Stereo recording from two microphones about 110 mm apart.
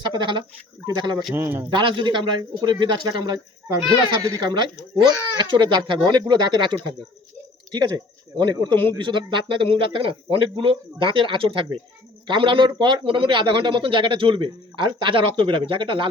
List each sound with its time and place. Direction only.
0.0 s speech: 45° right (ahead or behind)
1.4 s a man's voice: 20° right (ahead or behind)
1.7 s speech: 50° right (ahead or behind)